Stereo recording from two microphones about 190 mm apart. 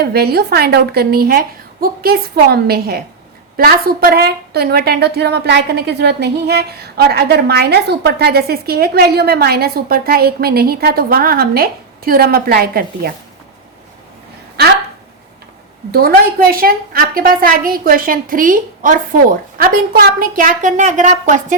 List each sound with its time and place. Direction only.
0.0 s a woman's voice: 55° right (ahead or behind)
15.9 s a woman's voice: 50° right (ahead or behind)